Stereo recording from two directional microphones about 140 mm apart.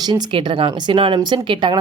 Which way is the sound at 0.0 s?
30° right (ahead or behind).